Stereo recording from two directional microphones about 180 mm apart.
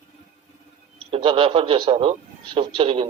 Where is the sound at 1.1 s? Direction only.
30° right (ahead or behind).